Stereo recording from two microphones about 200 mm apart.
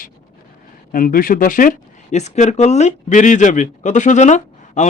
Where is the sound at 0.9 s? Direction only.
45° left (ahead or behind).